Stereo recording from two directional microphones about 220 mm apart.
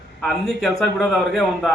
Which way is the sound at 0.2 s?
Centre (ahead or behind).